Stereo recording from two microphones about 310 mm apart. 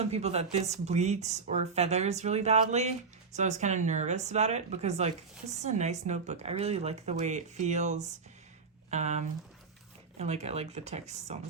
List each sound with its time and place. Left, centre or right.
0.0 s speech: centre